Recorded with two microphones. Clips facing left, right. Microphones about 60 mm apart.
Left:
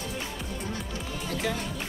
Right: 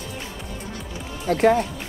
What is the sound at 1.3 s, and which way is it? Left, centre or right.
Speech, right.